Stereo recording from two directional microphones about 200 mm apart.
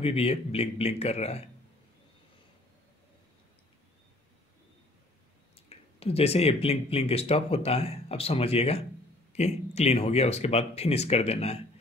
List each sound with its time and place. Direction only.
0.0 s speech: 30° left (ahead or behind)
5.7 s speech: 30° left (ahead or behind)